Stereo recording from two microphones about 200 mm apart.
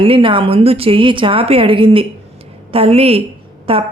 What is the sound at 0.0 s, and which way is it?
Speech, 25° right (ahead or behind).